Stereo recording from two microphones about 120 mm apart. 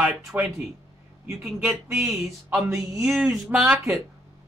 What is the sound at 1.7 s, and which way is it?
Speech, 5° right (ahead or behind).